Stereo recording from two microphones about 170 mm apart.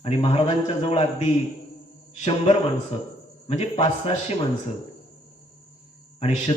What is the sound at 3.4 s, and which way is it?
Speech, 35° left (ahead or behind).